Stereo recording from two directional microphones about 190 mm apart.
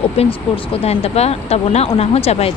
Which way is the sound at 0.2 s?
30° left (ahead or behind).